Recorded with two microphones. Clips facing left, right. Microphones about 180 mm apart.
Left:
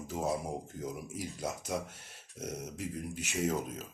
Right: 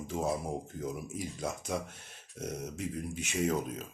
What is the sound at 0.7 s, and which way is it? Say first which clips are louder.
Speech: right 2 dB; 60° right (ahead or behind).